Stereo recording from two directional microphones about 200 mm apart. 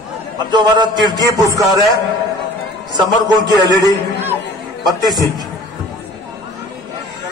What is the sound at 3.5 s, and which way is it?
Speech, 15° left (ahead or behind).